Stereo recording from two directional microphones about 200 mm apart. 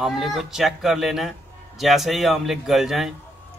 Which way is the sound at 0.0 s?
Centre (ahead or behind).